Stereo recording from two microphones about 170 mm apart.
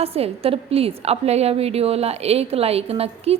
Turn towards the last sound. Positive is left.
turn(degrees=-35)  # may be behind; listen again after turning